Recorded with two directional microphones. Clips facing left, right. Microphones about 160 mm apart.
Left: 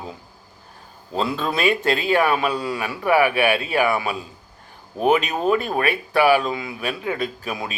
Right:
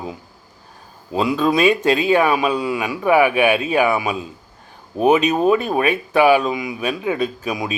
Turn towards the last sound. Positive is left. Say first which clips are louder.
# right 5 dB
turn(degrees=-15)  # may be behind; listen again after turning